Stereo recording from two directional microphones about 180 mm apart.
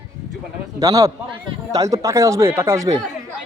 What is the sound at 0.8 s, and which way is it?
A man's voice, 20° right (ahead or behind).